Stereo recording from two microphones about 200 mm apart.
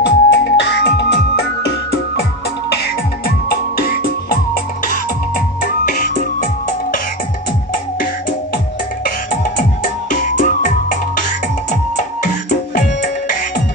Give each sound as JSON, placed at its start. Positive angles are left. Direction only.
{"t": 0.0, "sound": "music", "side_deg": 60}
{"t": 9.0, "sound": "music", "side_deg": 45}